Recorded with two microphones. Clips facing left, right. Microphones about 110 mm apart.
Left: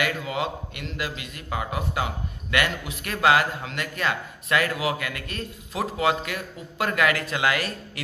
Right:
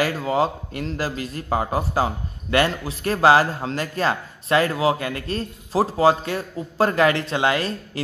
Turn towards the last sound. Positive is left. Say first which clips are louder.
# right 4 dB
turn(degrees=-30)  # may be behind; listen again after turning